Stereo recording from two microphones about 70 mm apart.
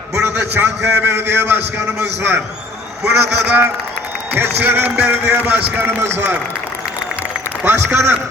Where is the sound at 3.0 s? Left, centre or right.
Centre.